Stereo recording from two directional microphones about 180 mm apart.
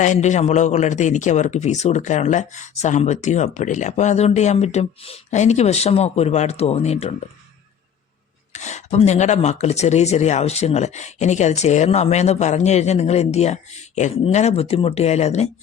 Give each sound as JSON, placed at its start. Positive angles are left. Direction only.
{"t": 0.0, "sound": "speech", "side_deg": 40}
{"t": 8.5, "sound": "speech", "side_deg": 40}